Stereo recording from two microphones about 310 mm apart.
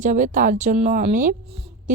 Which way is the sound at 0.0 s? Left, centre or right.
Right.